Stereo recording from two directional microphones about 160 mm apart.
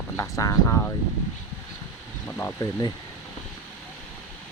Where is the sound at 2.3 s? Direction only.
15° left (ahead or behind).